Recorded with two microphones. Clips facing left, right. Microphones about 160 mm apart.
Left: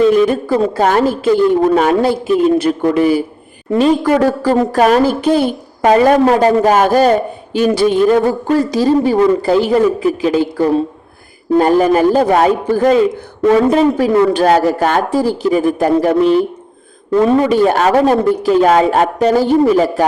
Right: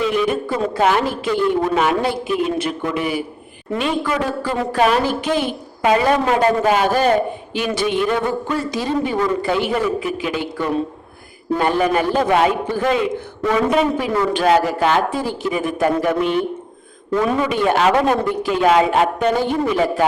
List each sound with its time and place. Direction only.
0.0 s a woman's voice: 40° left (ahead or behind)